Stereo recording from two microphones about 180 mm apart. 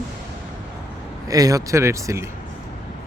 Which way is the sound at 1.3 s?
20° right (ahead or behind).